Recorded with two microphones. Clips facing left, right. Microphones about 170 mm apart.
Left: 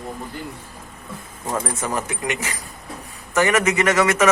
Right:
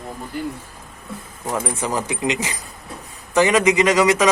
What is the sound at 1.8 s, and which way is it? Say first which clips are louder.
Speech: right 3 dB; 15° right (ahead or behind).